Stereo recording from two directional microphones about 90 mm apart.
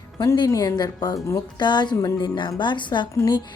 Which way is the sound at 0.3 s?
45° left (ahead or behind).